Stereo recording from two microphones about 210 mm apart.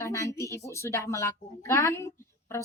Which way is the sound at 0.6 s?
15° left (ahead or behind).